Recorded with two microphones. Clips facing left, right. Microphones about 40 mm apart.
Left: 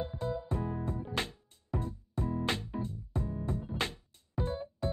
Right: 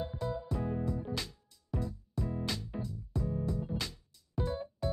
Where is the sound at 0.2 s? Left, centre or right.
Left.